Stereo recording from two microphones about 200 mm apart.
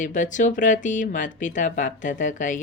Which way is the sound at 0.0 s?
40° left (ahead or behind).